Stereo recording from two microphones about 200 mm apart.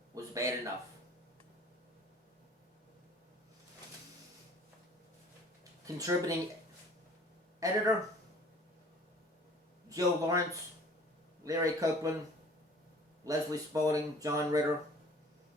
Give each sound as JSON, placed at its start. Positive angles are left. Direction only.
{"t": 0.1, "sound": "a sound", "side_deg": -15}
{"t": 5.8, "sound": "speech", "side_deg": -15}
{"t": 7.6, "sound": "speech", "side_deg": -15}
{"t": 9.9, "sound": "speech", "side_deg": -15}
{"t": 13.2, "sound": "speech", "side_deg": -15}